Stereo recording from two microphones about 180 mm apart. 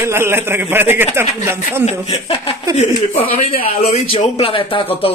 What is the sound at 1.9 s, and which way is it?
Speech, 35° left (ahead or behind).